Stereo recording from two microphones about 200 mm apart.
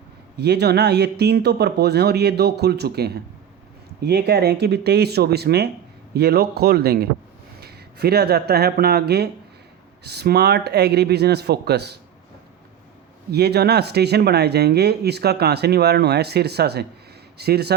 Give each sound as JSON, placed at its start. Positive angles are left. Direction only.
{"t": 0.3, "sound": "speech", "side_deg": -55}
{"t": 13.3, "sound": "speech", "side_deg": -55}